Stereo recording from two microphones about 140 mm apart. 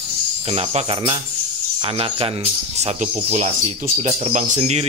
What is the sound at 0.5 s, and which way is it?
Speech, 45° right (ahead or behind).